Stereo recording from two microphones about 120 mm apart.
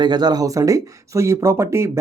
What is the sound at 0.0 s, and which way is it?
Speech, 35° right (ahead or behind).